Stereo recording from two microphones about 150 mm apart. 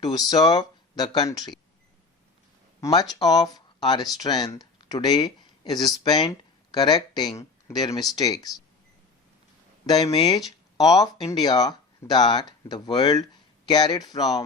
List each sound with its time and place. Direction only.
0.0 s speech: 25° left (ahead or behind)
2.8 s speech: 25° left (ahead or behind)
9.8 s speech: 25° left (ahead or behind)